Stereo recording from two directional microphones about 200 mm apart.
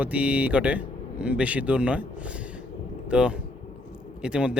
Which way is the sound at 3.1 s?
5° right (ahead or behind).